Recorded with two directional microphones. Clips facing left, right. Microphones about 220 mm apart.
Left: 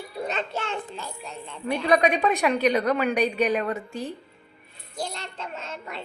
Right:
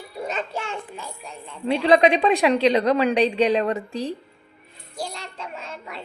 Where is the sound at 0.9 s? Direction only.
Centre (ahead or behind).